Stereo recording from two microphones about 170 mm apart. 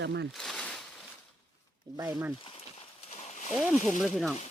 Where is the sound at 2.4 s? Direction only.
35° left (ahead or behind).